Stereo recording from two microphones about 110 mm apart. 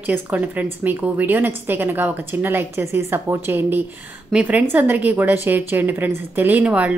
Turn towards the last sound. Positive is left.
turn(degrees=-10)  # may be behind; listen again after turning